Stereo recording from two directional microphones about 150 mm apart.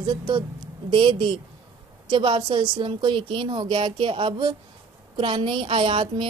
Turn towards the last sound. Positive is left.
turn(degrees=-35)  # may be behind; listen again after turning